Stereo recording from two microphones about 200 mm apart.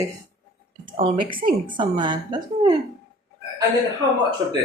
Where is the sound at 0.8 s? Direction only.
25° right (ahead or behind).